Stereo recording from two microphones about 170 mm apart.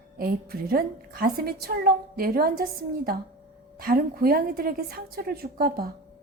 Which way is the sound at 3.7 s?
60° right (ahead or behind).